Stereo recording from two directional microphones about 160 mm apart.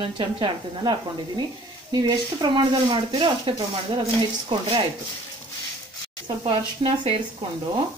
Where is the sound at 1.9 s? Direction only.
25° right (ahead or behind).